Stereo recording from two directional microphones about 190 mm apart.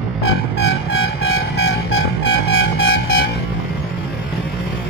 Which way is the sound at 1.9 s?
90° left.